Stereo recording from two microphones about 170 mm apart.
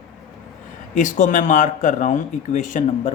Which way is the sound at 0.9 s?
45° left (ahead or behind).